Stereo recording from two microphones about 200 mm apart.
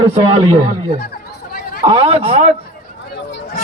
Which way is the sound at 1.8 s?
25° right (ahead or behind).